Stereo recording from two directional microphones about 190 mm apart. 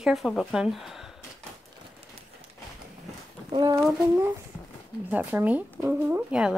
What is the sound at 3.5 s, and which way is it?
Speech, 20° right (ahead or behind).